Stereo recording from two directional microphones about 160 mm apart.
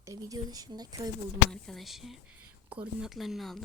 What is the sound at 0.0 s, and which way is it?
Speech, 20° right (ahead or behind).